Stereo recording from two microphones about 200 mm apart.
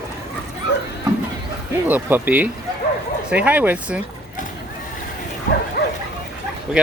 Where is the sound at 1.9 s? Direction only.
10° right (ahead or behind).